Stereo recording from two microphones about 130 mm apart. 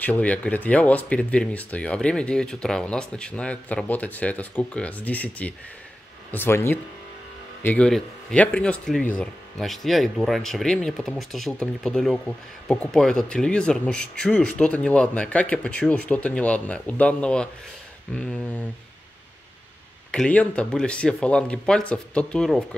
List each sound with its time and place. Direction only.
0.0 s speech: 10° left (ahead or behind)
20.1 s speech: 10° left (ahead or behind)